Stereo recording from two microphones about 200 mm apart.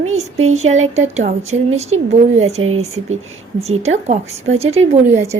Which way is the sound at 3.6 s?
30° right (ahead or behind).